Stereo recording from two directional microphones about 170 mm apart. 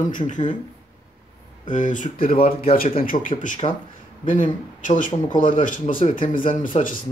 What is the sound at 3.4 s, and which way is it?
Speech, 50° left (ahead or behind).